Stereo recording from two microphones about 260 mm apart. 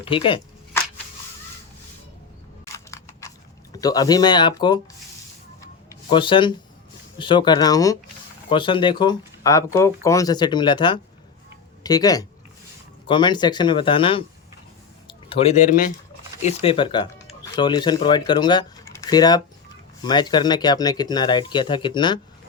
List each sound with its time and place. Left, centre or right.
0.0 s speech: centre
2.9 s a sound: centre
3.8 s speech: centre
6.1 s speech: centre
15.0 s a sound: left
16.4 s speech: left